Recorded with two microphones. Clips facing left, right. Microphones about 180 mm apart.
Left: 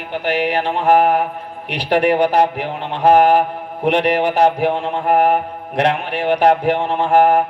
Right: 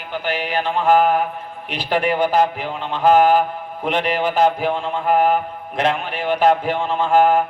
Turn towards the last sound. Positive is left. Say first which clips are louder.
# left 2 dB
turn(degrees=70)  # may be behind; listen again after turning